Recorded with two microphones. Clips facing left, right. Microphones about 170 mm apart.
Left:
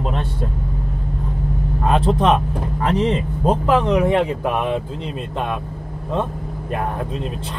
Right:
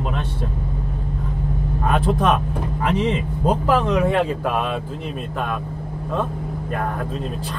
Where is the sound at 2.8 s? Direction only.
35° left (ahead or behind).